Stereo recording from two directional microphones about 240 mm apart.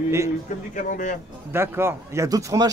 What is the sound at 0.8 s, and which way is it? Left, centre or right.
Speech, left.